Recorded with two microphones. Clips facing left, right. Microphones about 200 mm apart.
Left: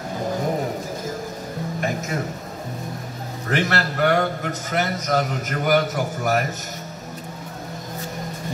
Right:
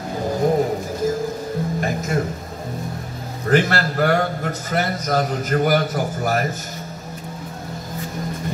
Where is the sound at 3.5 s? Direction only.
35° right (ahead or behind).